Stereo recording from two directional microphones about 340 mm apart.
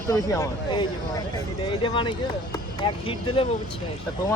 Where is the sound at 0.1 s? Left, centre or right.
Centre.